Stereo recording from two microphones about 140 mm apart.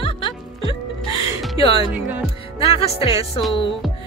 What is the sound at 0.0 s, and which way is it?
Music, 40° left (ahead or behind).